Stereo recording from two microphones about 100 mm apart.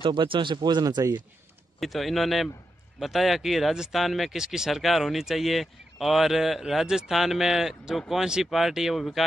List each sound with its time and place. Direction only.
0.0 s speech: 55° right (ahead or behind); by 1.2 s 40° right (ahead or behind)
1.8 s speech: centre (ahead or behind)